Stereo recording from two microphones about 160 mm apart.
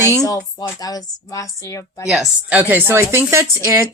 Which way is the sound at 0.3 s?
25° left (ahead or behind).